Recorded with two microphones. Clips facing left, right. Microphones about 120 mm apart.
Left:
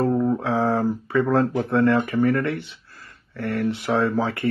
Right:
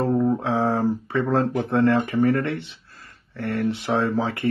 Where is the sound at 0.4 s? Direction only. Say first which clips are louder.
Left 1 dB; 30° right (ahead or behind).